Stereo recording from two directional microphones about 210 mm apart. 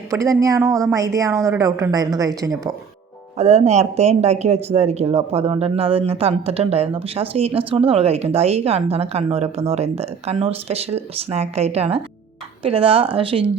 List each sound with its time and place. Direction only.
0.1 s a woman's voice: 15° right (ahead or behind)
3.3 s speech: 30° right (ahead or behind)